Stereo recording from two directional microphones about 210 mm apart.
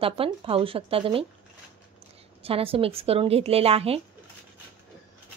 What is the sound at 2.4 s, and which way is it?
A woman's voice, 25° right (ahead or behind).